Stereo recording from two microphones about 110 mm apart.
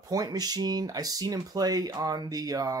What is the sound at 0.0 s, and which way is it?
Speech, 35° right (ahead or behind).